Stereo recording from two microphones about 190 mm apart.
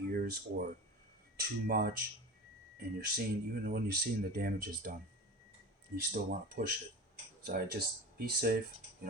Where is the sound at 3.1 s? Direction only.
50° right (ahead or behind).